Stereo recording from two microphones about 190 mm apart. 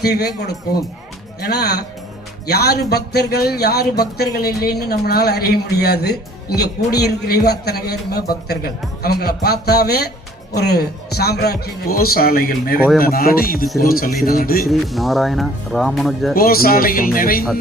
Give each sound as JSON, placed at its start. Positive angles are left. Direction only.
{"t": 0.0, "sound": "a man's voice", "side_deg": 60}
{"t": 14.7, "sound": "speech", "side_deg": 0}
{"t": 16.3, "sound": "a man's voice", "side_deg": 50}